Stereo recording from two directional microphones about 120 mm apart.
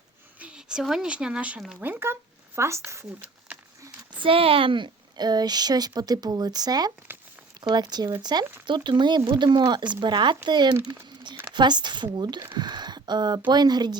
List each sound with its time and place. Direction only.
0.3 s speech: 10° right (ahead or behind); by 3.1 s 25° right (ahead or behind)
4.2 s a woman's voice: 50° right (ahead or behind)
12.5 s a sound: 35° right (ahead or behind)
13.5 s a woman's voice: 35° right (ahead or behind)